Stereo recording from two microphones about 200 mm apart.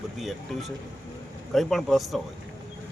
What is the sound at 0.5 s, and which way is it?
Speech, centre (ahead or behind).